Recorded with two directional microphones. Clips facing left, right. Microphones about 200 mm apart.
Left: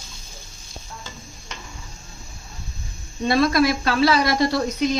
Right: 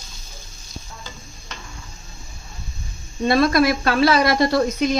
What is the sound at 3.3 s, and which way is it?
A woman's voice, 55° right (ahead or behind).